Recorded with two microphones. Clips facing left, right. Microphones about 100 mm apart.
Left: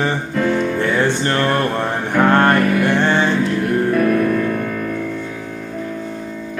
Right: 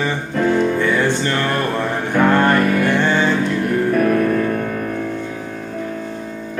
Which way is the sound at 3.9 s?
40° right (ahead or behind).